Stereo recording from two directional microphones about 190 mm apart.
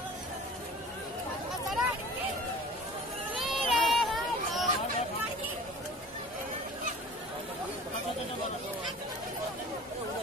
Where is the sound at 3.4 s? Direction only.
Centre (ahead or behind).